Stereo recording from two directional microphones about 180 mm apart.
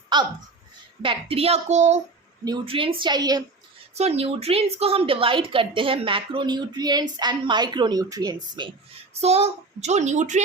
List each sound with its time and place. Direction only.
0.1 s a child's voice: 25° right (ahead or behind)
2.4 s a woman's voice: 25° right (ahead or behind)
3.9 s a woman's voice: 35° right (ahead or behind)
9.2 s a child's voice: 35° right (ahead or behind)